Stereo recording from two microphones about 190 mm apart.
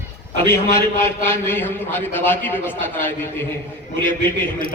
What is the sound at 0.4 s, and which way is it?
A man's voice, 15° left (ahead or behind).